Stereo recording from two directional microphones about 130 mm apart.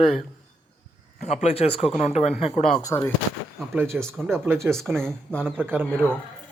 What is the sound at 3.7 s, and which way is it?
Speech, 15° right (ahead or behind).